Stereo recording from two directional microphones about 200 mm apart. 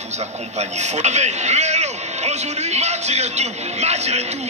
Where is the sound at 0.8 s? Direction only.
35° right (ahead or behind).